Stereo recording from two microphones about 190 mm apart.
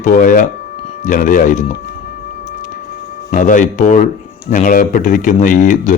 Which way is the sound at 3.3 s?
45° left (ahead or behind).